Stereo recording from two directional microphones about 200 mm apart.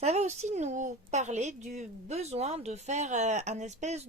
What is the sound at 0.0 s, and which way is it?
A woman's voice, 35° right (ahead or behind).